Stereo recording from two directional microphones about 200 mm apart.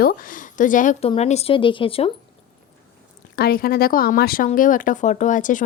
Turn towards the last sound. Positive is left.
turn(degrees=40)  # may be behind; listen again after turning